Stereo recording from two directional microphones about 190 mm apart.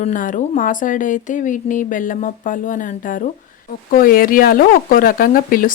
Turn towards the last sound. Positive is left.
turn(degrees=45)  # may be behind; listen again after turning